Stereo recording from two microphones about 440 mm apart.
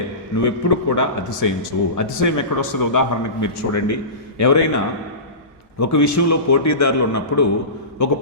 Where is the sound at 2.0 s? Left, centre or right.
Left.